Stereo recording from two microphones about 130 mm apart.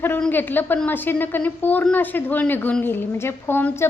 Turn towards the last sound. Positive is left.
turn(degrees=15)  # may be behind; listen again after turning